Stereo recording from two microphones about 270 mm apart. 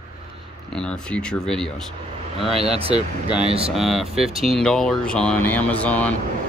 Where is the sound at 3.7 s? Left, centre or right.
Centre.